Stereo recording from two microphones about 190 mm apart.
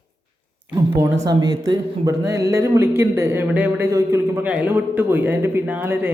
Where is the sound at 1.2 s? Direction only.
20° right (ahead or behind).